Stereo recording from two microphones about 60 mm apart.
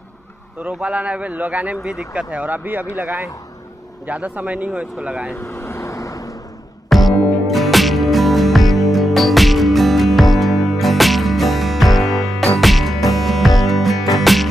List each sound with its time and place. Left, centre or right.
0.8 s speech: right
1.8 s speech: centre
2.1 s speech: right
5.3 s vehicle: left
6.9 s music: centre